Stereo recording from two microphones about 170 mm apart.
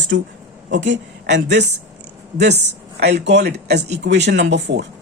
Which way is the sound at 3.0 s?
80° right.